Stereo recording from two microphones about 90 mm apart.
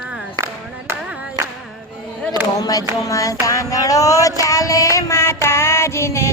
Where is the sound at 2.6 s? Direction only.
40° left (ahead or behind).